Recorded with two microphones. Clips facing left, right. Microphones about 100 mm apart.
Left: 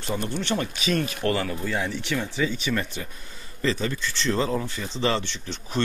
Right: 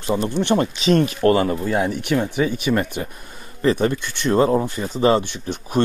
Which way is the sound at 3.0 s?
35° right (ahead or behind).